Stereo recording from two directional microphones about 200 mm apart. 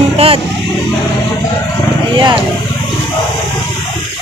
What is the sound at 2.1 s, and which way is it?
Speech, 20° right (ahead or behind).